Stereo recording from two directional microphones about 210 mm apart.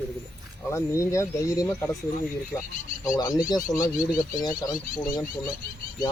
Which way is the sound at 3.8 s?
15° left (ahead or behind).